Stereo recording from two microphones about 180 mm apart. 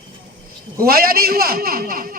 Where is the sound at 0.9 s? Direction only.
55° right (ahead or behind).